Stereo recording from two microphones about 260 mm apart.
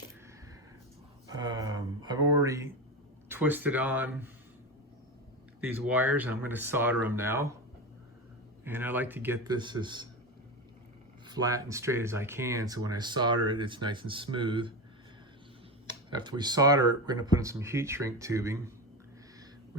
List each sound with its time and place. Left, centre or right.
1.4 s a sound: centre
3.2 s speech: centre
5.5 s speech: centre
8.6 s speech: centre
11.3 s speech: centre
15.9 s speech: centre